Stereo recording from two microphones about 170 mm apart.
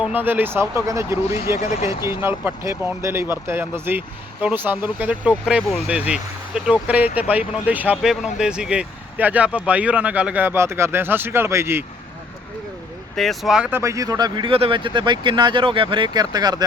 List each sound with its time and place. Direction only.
0.0 s speech: 10° right (ahead or behind)
1.5 s speech: 40° left (ahead or behind)
2.0 s speech: 15° right (ahead or behind)
13.1 s speech: centre (ahead or behind); by 16.6 s 25° right (ahead or behind)